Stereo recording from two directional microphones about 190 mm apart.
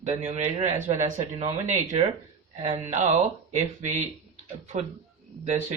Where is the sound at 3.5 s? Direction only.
40° right (ahead or behind).